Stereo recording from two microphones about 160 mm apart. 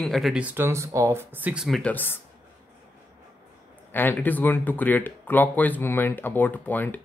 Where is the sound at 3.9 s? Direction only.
10° left (ahead or behind).